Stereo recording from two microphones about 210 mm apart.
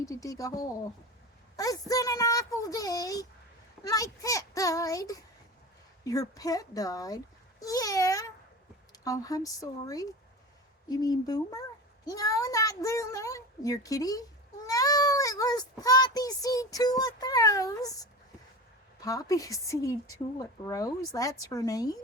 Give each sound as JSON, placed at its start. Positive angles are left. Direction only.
{"t": 0.0, "sound": "child singing", "side_deg": 15}